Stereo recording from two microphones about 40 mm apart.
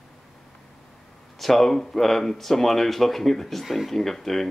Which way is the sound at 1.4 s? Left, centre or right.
Centre.